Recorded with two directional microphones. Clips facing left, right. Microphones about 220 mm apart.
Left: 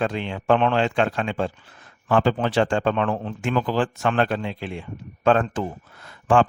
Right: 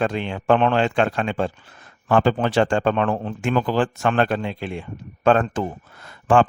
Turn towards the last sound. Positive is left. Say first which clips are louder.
# right 2 dB
turn(degrees=-50)  # may be behind; listen again after turning